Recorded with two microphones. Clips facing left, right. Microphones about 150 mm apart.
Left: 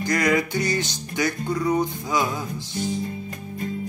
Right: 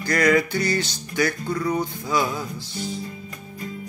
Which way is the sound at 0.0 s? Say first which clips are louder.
Right 2 dB; 20° left (ahead or behind).